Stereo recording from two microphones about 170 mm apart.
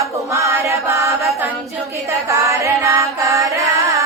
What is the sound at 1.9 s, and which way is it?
Chant, 15° right (ahead or behind).